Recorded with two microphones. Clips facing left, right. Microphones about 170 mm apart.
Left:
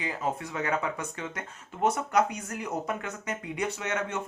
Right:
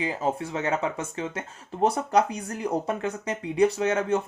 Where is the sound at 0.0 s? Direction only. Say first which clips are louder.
Right 5 dB; 30° right (ahead or behind).